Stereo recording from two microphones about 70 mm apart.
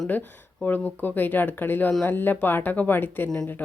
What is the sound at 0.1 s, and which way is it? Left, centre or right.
Speech, left.